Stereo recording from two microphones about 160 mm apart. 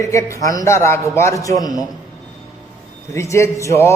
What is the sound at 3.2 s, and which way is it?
Speech, 20° left (ahead or behind).